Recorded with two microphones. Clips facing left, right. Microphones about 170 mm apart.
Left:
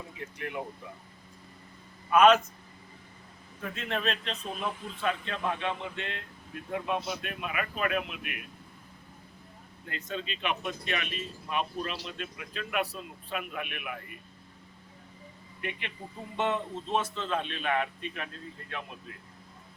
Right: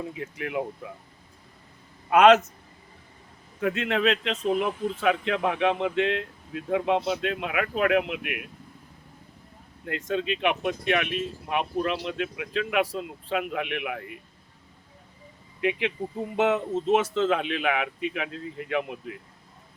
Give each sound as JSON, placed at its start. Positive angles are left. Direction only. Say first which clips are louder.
{"t": 2.0, "sound": "speech", "louder": "right 4 dB", "side_deg": -70}
{"t": 3.6, "sound": "speech", "louder": "right 9 dB", "side_deg": -85}
{"t": 9.8, "sound": "speech", "louder": "right 9 dB", "side_deg": -80}
{"t": 16.3, "sound": "speech", "louder": "right 6 dB", "side_deg": -90}